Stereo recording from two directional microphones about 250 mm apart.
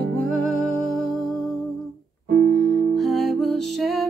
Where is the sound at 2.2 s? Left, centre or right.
Right.